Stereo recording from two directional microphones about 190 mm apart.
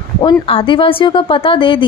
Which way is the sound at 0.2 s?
25° left (ahead or behind).